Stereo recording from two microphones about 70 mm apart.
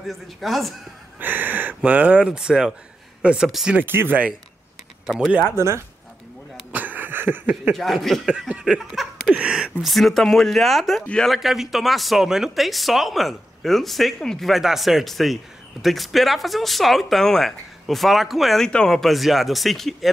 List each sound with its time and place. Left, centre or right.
0.1 s a woman's voice: centre
1.2 s speech: right
3.4 s a woman's voice: centre
3.8 s speech: right
5.0 s speech: centre
5.6 s speech: right
6.7 s a sound: right
7.7 s a woman's voice: centre
8.3 s a sound: centre
8.7 s laughter: centre
9.3 s a woman's voice: centre